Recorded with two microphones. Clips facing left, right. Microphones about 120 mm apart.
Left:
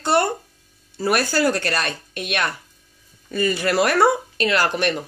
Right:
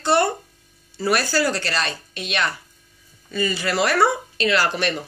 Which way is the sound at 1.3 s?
50° left (ahead or behind).